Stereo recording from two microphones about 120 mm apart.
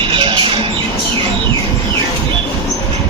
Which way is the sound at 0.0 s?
45° right (ahead or behind).